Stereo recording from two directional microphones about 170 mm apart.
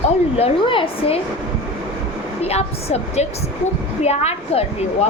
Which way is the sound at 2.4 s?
35° left (ahead or behind).